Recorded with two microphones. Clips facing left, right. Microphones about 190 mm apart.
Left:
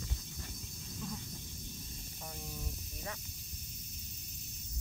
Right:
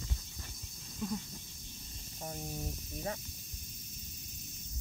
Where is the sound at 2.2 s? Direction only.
35° right (ahead or behind).